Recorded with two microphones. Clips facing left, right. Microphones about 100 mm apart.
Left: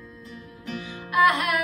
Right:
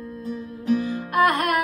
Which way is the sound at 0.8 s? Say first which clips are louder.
Left 3 dB; 45° right (ahead or behind).